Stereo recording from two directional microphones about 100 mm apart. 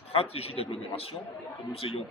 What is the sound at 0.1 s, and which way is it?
A man's voice, 80° left.